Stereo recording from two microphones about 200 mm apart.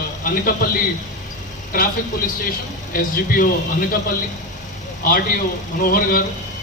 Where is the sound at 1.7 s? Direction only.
45° left (ahead or behind).